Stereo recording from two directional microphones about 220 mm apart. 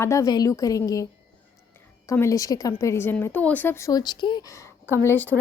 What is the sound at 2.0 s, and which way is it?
A woman's voice, 15° left (ahead or behind).